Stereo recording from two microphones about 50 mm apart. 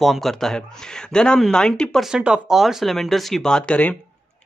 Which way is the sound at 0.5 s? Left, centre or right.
Centre.